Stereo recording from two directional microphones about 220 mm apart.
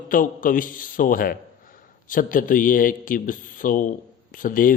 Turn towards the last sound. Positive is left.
turn(degrees=40)  # may be behind; listen again after turning